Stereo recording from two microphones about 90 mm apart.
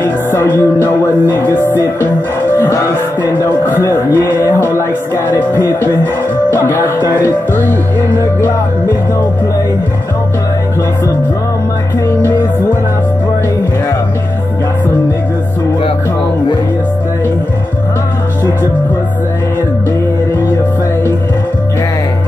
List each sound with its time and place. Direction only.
0.0 s music: 25° left (ahead or behind)
2.5 s speech: 30° left (ahead or behind)
12.2 s music: 25° left (ahead or behind)